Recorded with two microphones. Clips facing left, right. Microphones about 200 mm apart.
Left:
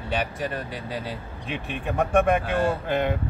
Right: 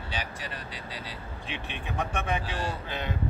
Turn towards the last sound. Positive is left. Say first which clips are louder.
# left 10 dB
turn(degrees=55)  # may be behind; listen again after turning